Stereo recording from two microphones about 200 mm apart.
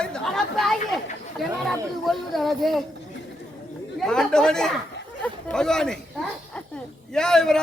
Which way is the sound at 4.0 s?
5° left (ahead or behind).